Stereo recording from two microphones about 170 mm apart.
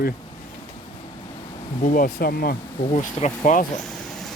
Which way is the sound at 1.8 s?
55° left (ahead or behind).